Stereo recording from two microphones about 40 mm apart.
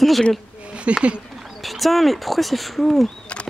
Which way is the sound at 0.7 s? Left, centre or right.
Right.